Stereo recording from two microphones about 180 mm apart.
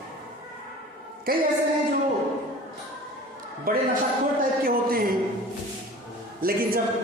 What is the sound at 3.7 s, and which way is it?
A woman's voice, 50° right (ahead or behind).